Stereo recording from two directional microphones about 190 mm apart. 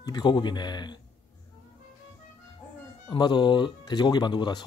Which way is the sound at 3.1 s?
25° left (ahead or behind).